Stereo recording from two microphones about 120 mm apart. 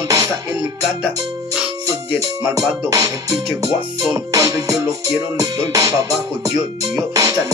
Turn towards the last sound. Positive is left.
turn(degrees=-30)  # may be behind; listen again after turning